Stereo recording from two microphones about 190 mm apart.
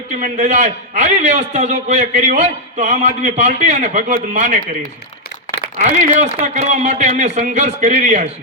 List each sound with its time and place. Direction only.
0.2 s a man's voice: 40° right (ahead or behind)
6.1 s a man's voice: 40° right (ahead or behind)